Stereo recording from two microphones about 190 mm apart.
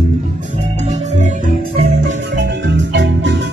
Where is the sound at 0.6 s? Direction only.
35° right (ahead or behind).